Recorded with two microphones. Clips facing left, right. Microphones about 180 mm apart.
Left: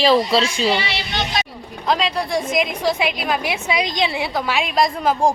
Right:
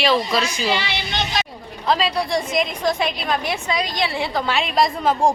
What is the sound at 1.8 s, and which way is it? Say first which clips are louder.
A woman's voice: even; 5° right (ahead or behind).